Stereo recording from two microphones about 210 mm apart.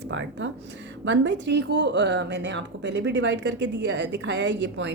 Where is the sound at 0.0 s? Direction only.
60° right (ahead or behind).